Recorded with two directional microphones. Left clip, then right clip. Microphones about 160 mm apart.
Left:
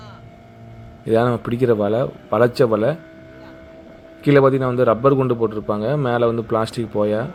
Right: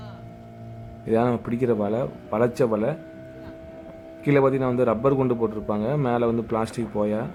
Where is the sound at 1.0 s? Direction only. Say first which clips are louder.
Left 5 dB; 15° left (ahead or behind).